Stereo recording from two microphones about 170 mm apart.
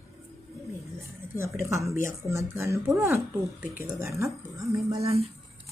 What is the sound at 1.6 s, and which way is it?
Speech, 15° right (ahead or behind).